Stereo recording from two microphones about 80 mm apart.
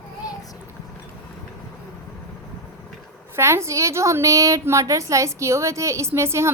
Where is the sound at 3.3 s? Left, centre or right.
Right.